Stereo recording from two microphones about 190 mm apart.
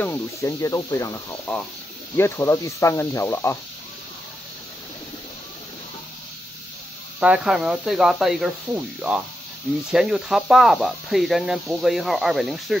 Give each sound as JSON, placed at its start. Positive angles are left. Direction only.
{"t": 0.0, "sound": "speech", "side_deg": 15}
{"t": 7.2, "sound": "speech", "side_deg": -5}